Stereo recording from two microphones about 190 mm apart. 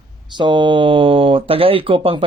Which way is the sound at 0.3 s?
25° right (ahead or behind).